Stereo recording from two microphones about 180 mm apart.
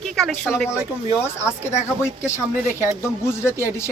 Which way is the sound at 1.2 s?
15° left (ahead or behind).